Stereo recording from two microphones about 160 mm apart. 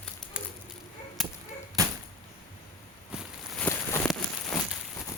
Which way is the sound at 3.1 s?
5° left (ahead or behind).